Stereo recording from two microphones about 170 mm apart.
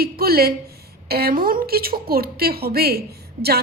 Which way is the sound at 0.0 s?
65° right (ahead or behind).